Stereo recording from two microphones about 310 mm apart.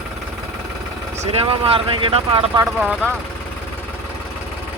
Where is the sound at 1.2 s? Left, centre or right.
Centre.